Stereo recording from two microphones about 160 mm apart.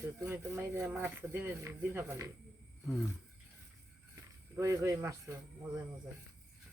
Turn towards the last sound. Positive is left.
turn(degrees=-20)  # may be behind; listen again after turning